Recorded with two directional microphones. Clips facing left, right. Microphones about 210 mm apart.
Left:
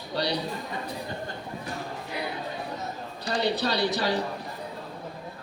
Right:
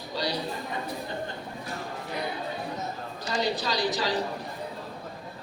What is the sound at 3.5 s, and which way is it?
Speech, 65° left (ahead or behind).